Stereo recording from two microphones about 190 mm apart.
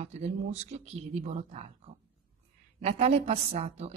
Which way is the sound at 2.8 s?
35° right (ahead or behind).